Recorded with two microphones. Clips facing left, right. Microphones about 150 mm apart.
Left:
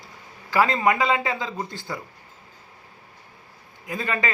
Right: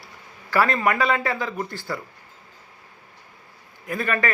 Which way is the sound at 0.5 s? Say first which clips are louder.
Even; 20° left (ahead or behind).